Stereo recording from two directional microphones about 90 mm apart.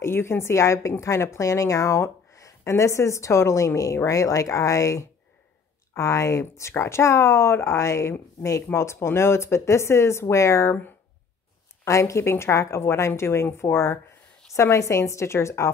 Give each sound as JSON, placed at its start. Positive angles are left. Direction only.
{"t": 0.0, "sound": "a woman's voice", "side_deg": 30}